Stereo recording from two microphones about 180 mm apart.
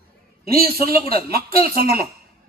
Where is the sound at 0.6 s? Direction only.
55° right (ahead or behind).